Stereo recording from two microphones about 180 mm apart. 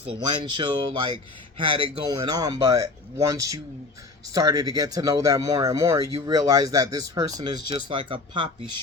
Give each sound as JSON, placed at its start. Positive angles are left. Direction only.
{"t": 0.1, "sound": "speech", "side_deg": -25}